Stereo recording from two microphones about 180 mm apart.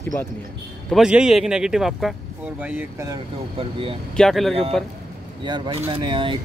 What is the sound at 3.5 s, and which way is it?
Speech, 30° right (ahead or behind).